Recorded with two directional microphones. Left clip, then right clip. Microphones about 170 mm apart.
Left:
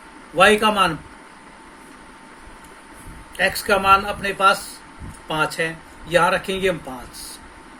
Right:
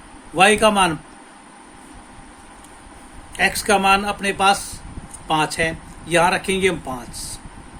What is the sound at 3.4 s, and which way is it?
Speech, 65° right (ahead or behind).